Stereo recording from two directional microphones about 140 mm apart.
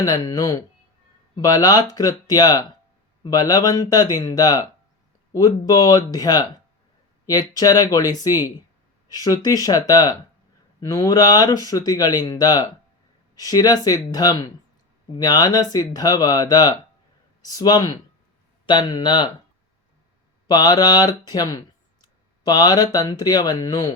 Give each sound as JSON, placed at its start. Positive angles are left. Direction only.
{"t": 0.0, "sound": "speech", "side_deg": 25}
{"t": 20.5, "sound": "speech", "side_deg": 30}